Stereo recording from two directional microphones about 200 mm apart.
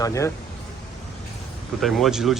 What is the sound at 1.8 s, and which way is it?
Speech, centre (ahead or behind).